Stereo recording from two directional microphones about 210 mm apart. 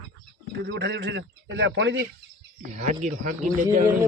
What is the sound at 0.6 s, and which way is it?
A man's voice, 55° right (ahead or behind).